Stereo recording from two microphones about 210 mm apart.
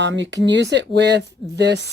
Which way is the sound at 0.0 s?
60° right (ahead or behind).